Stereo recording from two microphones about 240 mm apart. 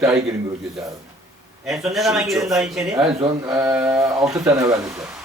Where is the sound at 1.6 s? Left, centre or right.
Centre.